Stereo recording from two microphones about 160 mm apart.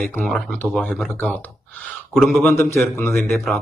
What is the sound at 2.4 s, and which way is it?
Speech, 10° left (ahead or behind).